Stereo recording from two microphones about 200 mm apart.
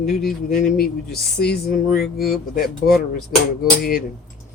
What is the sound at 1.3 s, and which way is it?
Speech, 55° left (ahead or behind).